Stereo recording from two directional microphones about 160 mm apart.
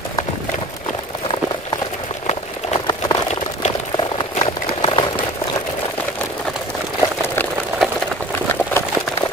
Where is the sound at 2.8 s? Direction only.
25° left (ahead or behind).